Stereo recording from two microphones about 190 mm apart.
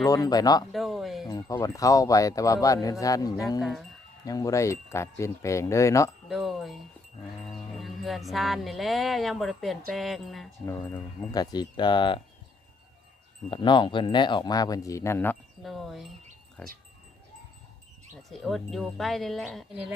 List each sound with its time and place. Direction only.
0.0 s speech: 20° left (ahead or behind)
0.7 s a sound: centre (ahead or behind)
1.3 s speech: 20° left (ahead or behind)
3.6 s speech: centre (ahead or behind)
4.3 s speech: 20° left (ahead or behind)
6.2 s speech: centre (ahead or behind)
7.4 s music: centre (ahead or behind)
9.9 s speech: centre (ahead or behind)
11.3 s speech: 20° left (ahead or behind)
13.5 s speech: 25° left (ahead or behind)
15.6 s speech: centre (ahead or behind)
18.3 s speech: centre (ahead or behind)